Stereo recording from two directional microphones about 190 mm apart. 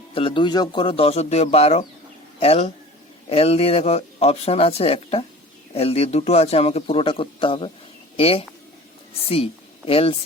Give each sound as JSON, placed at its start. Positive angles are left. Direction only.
{"t": 0.1, "sound": "a man's voice", "side_deg": 30}